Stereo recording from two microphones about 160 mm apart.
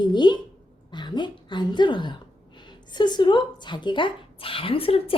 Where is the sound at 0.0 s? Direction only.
30° left (ahead or behind).